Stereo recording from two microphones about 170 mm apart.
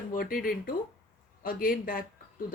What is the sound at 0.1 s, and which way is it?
Speech, 60° left (ahead or behind).